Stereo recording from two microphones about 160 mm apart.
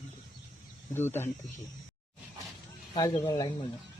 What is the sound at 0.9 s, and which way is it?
Speech, 15° left (ahead or behind).